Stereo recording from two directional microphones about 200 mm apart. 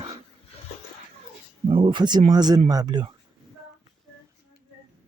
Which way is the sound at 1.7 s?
25° right (ahead or behind).